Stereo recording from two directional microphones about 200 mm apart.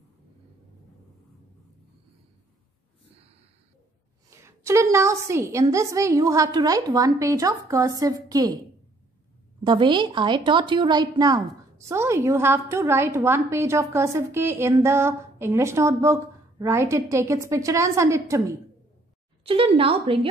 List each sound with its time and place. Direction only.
4.4 s a woman's voice: 15° right (ahead or behind)
9.6 s a woman's voice: 25° right (ahead or behind)
19.4 s speech: 30° right (ahead or behind)